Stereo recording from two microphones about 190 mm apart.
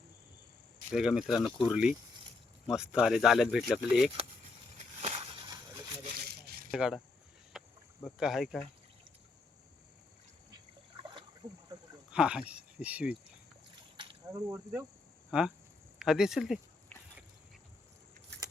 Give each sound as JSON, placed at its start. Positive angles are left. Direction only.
{"t": 0.9, "sound": "speech", "side_deg": 0}
{"t": 4.9, "sound": "a sound", "side_deg": -35}
{"t": 6.0, "sound": "a sound", "side_deg": -50}
{"t": 6.7, "sound": "speech", "side_deg": -5}
{"t": 7.5, "sound": "rowboat", "side_deg": 0}
{"t": 8.0, "sound": "speech", "side_deg": 0}
{"t": 11.4, "sound": "speech", "side_deg": -20}
{"t": 12.1, "sound": "speech", "side_deg": -5}
{"t": 13.9, "sound": "a sound", "side_deg": -25}
{"t": 14.3, "sound": "speech", "side_deg": -15}
{"t": 15.3, "sound": "speech", "side_deg": -5}
{"t": 16.9, "sound": "a sound", "side_deg": 10}